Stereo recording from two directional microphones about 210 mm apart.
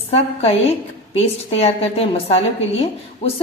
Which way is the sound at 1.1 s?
30° left (ahead or behind).